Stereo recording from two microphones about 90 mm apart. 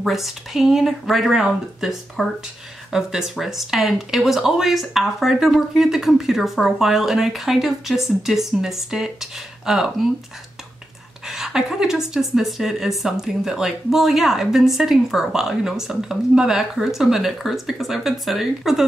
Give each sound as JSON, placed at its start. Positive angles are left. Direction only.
{"t": 0.0, "sound": "a woman's voice", "side_deg": 0}
{"t": 11.2, "sound": "a woman's voice", "side_deg": -5}